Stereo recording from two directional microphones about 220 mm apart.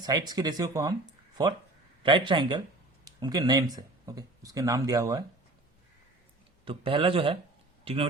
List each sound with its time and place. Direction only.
0.0 s a man's voice: 20° right (ahead or behind)
6.7 s a man's voice: 25° right (ahead or behind)